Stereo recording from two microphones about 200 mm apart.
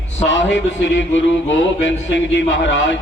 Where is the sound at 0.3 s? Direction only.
65° left (ahead or behind).